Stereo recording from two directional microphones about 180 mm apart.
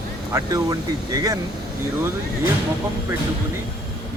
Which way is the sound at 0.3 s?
20° right (ahead or behind).